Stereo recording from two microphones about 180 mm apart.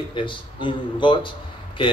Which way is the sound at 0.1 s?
25° left (ahead or behind).